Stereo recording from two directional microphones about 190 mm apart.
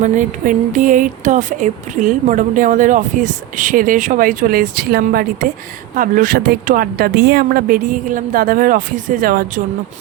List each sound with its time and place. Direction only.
0.0 s speech: 40° right (ahead or behind)